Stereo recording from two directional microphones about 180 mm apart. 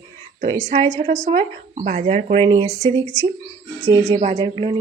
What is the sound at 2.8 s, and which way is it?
Speech, 15° left (ahead or behind).